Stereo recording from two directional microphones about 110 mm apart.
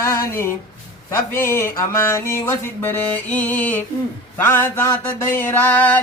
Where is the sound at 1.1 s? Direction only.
20° left (ahead or behind).